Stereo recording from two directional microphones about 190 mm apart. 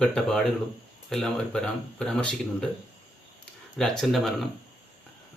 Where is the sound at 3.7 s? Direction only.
Centre (ahead or behind).